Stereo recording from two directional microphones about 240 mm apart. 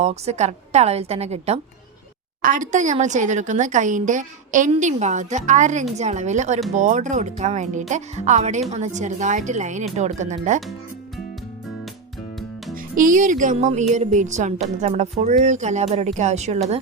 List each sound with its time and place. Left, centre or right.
0.0 s a woman's voice: right
12.7 s music: right
13.9 s a woman's voice: right